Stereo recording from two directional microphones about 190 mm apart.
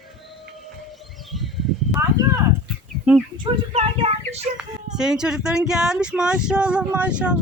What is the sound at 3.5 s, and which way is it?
Speech, 25° right (ahead or behind).